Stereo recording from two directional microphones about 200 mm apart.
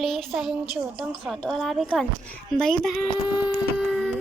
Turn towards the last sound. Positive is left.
turn(degrees=0)  # may be behind; listen again after turning